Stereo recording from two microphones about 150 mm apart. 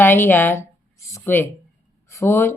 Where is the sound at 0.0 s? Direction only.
15° left (ahead or behind).